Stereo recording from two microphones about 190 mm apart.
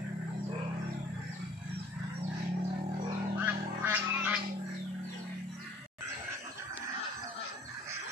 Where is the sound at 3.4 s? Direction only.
10° right (ahead or behind).